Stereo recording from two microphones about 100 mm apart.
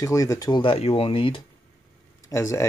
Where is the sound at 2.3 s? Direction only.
30° left (ahead or behind).